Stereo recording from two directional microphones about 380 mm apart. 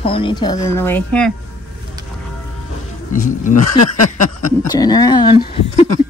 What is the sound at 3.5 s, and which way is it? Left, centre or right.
Speech, left.